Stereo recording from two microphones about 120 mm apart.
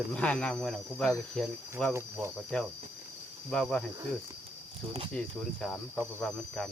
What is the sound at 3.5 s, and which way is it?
Speech, 5° left (ahead or behind).